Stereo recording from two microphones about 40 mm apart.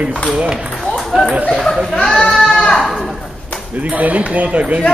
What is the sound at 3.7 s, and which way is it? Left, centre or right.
Speech, right.